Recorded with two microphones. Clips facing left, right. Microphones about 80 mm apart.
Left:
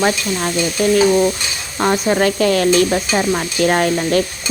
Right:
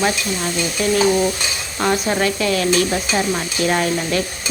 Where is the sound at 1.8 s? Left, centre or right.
Centre.